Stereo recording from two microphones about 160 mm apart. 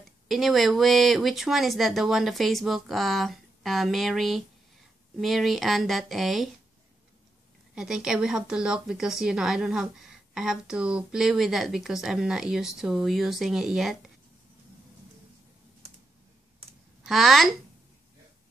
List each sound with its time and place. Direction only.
0.3 s a woman's voice: centre (ahead or behind)
7.7 s a woman's voice: 5° right (ahead or behind)
17.0 s a woman's voice: centre (ahead or behind)